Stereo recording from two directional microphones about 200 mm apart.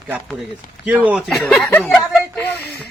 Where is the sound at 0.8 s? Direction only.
5° right (ahead or behind).